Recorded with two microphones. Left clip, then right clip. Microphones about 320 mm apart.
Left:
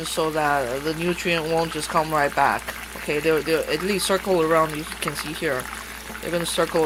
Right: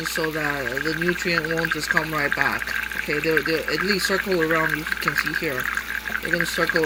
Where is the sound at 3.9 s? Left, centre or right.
Centre.